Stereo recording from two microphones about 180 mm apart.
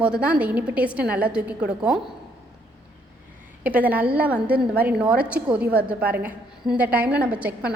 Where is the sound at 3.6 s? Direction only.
10° right (ahead or behind).